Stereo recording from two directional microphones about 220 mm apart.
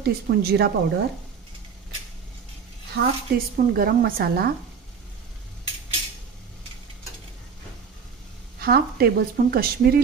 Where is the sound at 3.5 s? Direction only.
40° right (ahead or behind).